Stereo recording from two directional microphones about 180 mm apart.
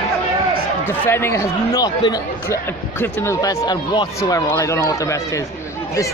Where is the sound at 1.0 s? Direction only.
15° left (ahead or behind).